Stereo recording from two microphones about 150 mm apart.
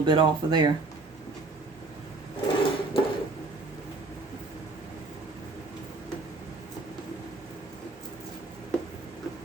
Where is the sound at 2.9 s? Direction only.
35° left (ahead or behind).